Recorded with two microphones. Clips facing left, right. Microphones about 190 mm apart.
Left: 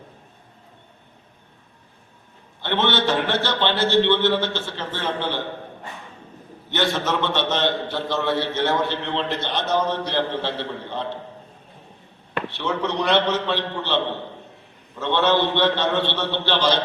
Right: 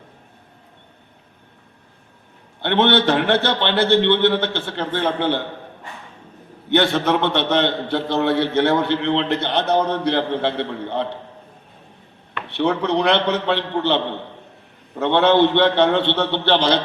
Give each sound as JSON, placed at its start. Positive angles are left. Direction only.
{"t": 2.6, "sound": "a man's voice", "side_deg": -60}
{"t": 6.7, "sound": "a man's voice", "side_deg": -60}
{"t": 12.5, "sound": "a man's voice", "side_deg": -60}